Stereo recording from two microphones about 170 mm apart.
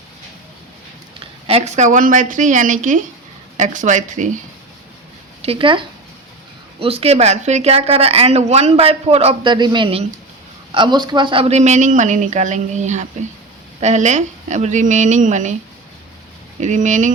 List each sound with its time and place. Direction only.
1.5 s speech: 40° right (ahead or behind)
5.4 s speech: 35° right (ahead or behind)
16.6 s speech: 45° right (ahead or behind)